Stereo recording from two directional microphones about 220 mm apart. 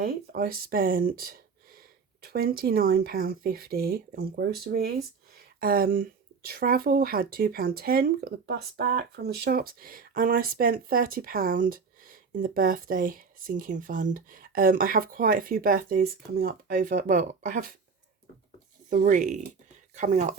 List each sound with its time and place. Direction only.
0.0 s speech: 40° right (ahead or behind)
18.9 s speech: 35° right (ahead or behind)